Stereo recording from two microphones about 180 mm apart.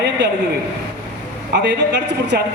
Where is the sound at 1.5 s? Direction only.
65° right (ahead or behind).